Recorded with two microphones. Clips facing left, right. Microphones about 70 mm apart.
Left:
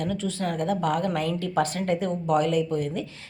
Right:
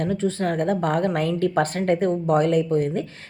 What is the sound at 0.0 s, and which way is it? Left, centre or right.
Speech, right.